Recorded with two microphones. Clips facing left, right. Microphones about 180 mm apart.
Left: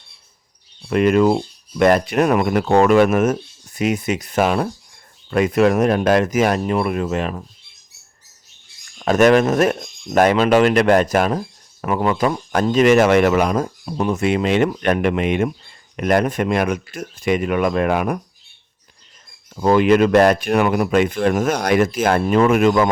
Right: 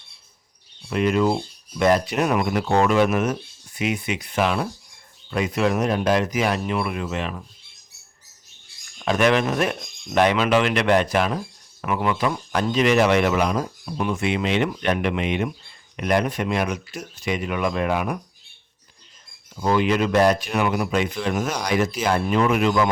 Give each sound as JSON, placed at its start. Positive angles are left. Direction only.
{"t": 0.9, "sound": "speech", "side_deg": 60}
{"t": 9.0, "sound": "speech", "side_deg": 45}
{"t": 19.5, "sound": "speech", "side_deg": 55}